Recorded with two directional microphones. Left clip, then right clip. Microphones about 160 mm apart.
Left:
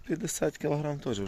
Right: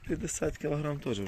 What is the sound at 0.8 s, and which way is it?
Speech, centre (ahead or behind).